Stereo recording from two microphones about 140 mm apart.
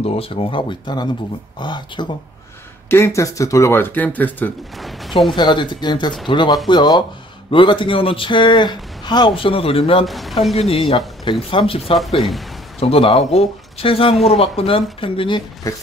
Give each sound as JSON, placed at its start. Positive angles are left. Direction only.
{"t": 0.0, "sound": "speech", "side_deg": 45}
{"t": 2.9, "sound": "speech", "side_deg": 20}
{"t": 4.7, "sound": "a sound", "side_deg": 0}
{"t": 5.3, "sound": "speech", "side_deg": 35}
{"t": 10.0, "sound": "speech", "side_deg": 0}
{"t": 10.5, "sound": "speech", "side_deg": 45}